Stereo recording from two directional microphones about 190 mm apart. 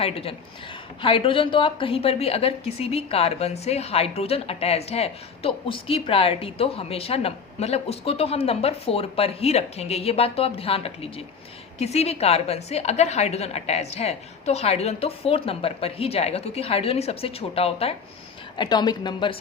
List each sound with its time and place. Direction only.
0.0 s a woman's voice: 30° left (ahead or behind)